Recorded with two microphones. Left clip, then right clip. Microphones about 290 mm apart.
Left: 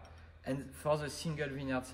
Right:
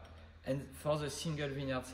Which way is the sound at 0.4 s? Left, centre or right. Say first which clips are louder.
Even; centre.